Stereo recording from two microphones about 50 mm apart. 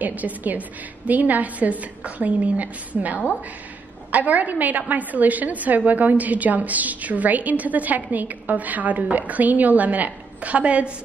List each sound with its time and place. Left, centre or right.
0.0 s a woman's voice: right